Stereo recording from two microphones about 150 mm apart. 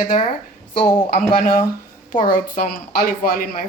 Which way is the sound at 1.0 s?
70° left (ahead or behind).